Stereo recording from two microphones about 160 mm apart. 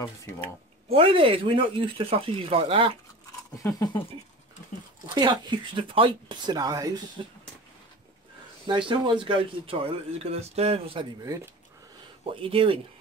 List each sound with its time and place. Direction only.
0.8 s speech: 35° right (ahead or behind)
5.0 s speech: 25° right (ahead or behind)
8.6 s speech: 30° right (ahead or behind)
11.2 s speech: 20° right (ahead or behind)
12.3 s speech: 35° right (ahead or behind)